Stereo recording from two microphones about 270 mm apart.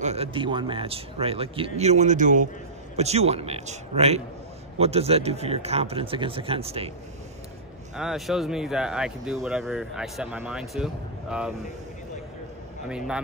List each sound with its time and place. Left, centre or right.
0.0 s speech: right
7.9 s speech: centre
12.8 s speech: centre